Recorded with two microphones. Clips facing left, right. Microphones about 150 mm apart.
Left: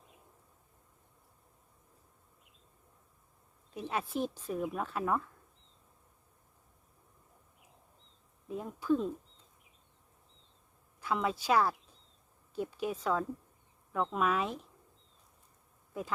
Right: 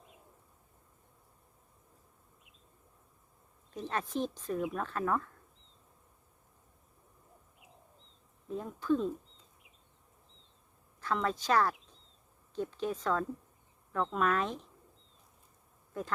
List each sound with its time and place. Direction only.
3.8 s speech: 10° left (ahead or behind)
8.4 s speech: 10° left (ahead or behind)
11.0 s speech: 10° left (ahead or behind)
15.9 s speech: 5° left (ahead or behind)